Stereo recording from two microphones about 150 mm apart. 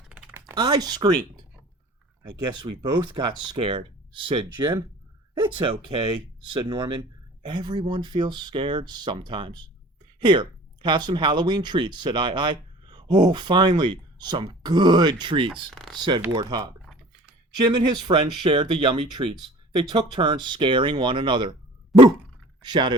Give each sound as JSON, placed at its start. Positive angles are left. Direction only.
{"t": 0.1, "sound": "typing", "side_deg": -10}
{"t": 0.5, "sound": "speech", "side_deg": -30}
{"t": 2.6, "sound": "speech", "side_deg": -30}
{"t": 15.7, "sound": "computer keyboard", "side_deg": 0}
{"t": 16.0, "sound": "speech", "side_deg": -30}
{"t": 22.6, "sound": "speech", "side_deg": -30}